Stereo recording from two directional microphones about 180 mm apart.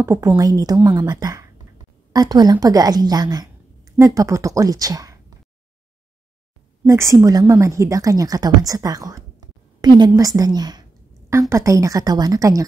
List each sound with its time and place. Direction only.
0.0 s a woman's voice: 15° right (ahead or behind)
6.9 s a woman's voice: 15° right (ahead or behind)